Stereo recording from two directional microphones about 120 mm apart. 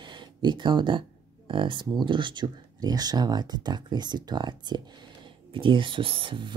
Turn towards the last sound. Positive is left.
turn(degrees=-45)  # may be behind; listen again after turning